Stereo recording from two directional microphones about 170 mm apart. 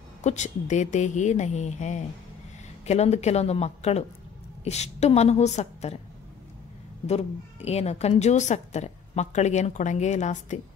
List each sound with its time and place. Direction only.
0.2 s a woman's voice: 45° left (ahead or behind)
7.1 s a woman's voice: 40° left (ahead or behind)